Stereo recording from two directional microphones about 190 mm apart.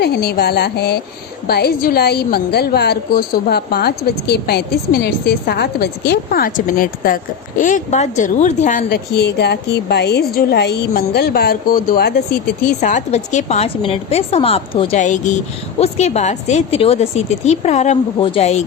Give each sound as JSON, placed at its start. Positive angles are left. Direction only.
{"t": 0.0, "sound": "a woman's voice", "side_deg": 60}
{"t": 8.9, "sound": "a woman's voice", "side_deg": 60}
{"t": 12.8, "sound": "speech", "side_deg": 35}